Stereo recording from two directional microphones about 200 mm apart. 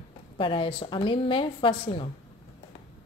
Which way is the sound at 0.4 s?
25° left (ahead or behind).